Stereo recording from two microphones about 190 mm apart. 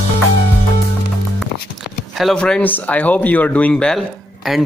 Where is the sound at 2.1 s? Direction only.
Centre (ahead or behind).